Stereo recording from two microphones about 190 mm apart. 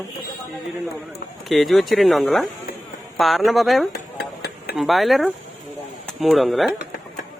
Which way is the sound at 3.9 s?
55° left (ahead or behind).